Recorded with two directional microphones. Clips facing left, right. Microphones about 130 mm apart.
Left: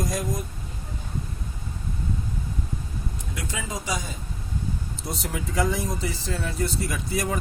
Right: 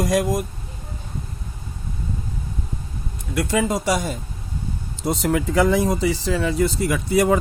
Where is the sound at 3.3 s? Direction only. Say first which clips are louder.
Right 13 dB; 65° right (ahead or behind).